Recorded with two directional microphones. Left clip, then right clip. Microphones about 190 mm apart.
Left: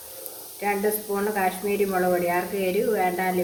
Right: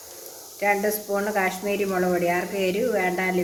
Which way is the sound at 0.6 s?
45° right (ahead or behind).